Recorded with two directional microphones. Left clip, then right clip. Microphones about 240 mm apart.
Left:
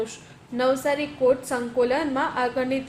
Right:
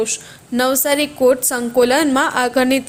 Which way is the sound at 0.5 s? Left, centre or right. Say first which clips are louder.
Right 6 dB; right.